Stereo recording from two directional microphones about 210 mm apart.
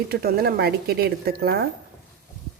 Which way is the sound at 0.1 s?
45° right (ahead or behind).